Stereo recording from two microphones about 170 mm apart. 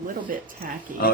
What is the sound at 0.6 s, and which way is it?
Speech, 55° right (ahead or behind).